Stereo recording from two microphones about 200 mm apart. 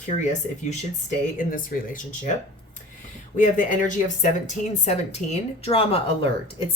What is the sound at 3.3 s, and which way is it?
A woman's voice, 40° left (ahead or behind).